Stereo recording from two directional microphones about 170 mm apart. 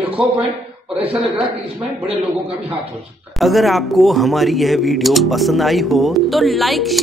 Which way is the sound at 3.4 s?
Centre (ahead or behind).